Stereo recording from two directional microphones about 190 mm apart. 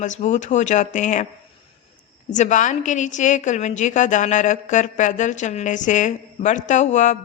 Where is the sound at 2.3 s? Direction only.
40° left (ahead or behind).